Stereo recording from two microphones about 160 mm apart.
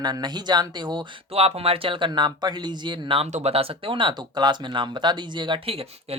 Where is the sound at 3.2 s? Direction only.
45° right (ahead or behind).